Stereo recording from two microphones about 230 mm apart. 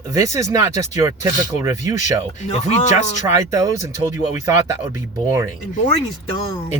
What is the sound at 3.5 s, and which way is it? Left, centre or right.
Speech, centre.